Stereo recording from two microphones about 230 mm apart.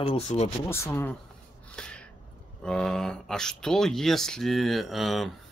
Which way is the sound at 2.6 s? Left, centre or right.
Centre.